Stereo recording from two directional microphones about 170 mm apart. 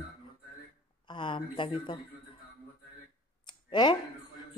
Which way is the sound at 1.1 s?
30° left (ahead or behind).